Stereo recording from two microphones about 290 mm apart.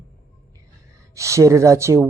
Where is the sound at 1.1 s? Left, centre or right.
Centre.